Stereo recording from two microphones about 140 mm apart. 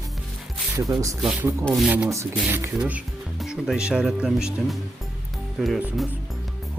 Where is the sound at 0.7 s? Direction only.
20° right (ahead or behind).